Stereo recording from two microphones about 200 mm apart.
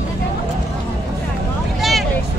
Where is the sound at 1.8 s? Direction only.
Centre (ahead or behind).